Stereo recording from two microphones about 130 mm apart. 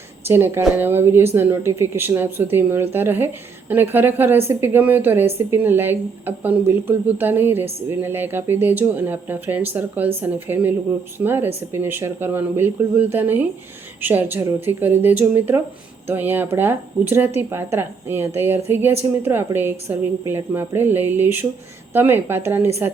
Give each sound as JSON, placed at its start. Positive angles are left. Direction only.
{"t": 0.3, "sound": "a woman's voice", "side_deg": -15}